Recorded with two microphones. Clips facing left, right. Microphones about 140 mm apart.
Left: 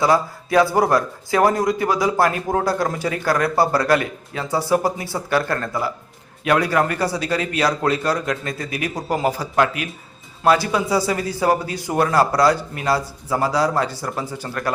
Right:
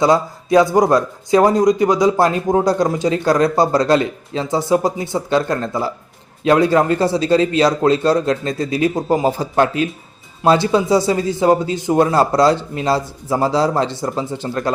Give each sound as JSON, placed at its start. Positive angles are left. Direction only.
{"t": 0.0, "sound": "speech", "side_deg": -20}